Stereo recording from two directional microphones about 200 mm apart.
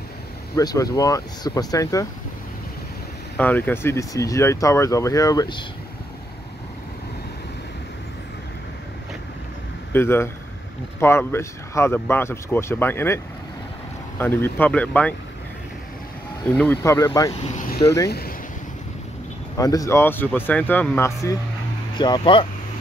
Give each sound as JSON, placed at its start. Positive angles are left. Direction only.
{"t": 0.6, "sound": "speech", "side_deg": 20}
{"t": 3.3, "sound": "speech", "side_deg": 10}
{"t": 9.9, "sound": "speech", "side_deg": 10}
{"t": 16.4, "sound": "speech", "side_deg": 5}
{"t": 17.3, "sound": "speech", "side_deg": 30}
{"t": 18.0, "sound": "speech", "side_deg": 50}
{"t": 19.5, "sound": "speech", "side_deg": 15}